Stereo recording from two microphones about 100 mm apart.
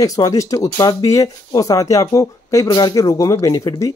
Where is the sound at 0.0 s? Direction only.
35° left (ahead or behind).